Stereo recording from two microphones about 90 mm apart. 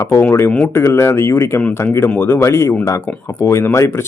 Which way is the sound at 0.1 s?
25° left (ahead or behind).